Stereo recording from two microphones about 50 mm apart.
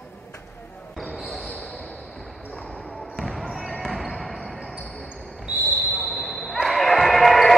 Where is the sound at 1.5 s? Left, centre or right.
Centre.